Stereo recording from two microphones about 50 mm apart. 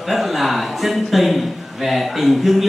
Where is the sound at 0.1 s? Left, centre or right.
Centre.